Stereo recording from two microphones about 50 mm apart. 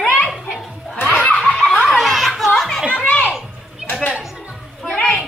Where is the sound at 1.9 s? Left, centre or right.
Centre.